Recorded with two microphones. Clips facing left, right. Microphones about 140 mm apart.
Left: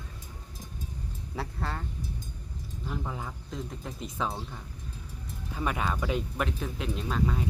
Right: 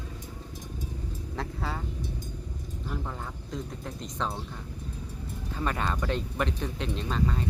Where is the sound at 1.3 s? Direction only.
Centre (ahead or behind).